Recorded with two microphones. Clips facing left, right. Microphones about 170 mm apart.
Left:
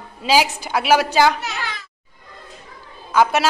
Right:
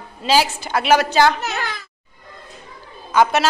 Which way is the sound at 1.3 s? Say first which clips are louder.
Right 3 dB; 50° right (ahead or behind).